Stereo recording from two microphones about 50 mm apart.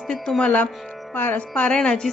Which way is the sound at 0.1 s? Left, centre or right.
Centre.